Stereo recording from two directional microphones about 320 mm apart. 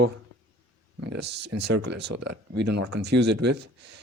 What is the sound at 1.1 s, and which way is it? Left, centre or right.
A man's voice, right.